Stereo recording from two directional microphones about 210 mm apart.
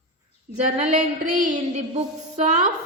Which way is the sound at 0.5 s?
30° right (ahead or behind).